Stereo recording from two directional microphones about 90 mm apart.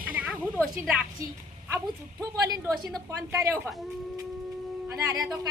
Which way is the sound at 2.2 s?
45° right (ahead or behind).